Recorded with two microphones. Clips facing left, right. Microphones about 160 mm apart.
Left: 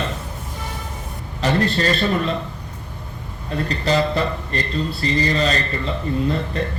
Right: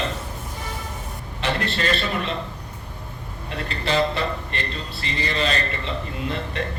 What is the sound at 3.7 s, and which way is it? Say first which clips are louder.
Speech: left 2 dB; 40° left (ahead or behind).